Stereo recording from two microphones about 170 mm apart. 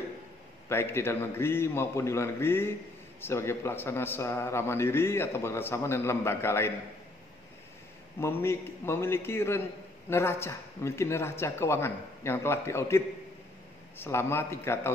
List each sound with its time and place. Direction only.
0.7 s a man's voice: 15° left (ahead or behind)
8.2 s a man's voice: 15° left (ahead or behind)